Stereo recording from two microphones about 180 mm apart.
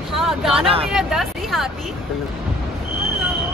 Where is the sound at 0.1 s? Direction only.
Centre (ahead or behind).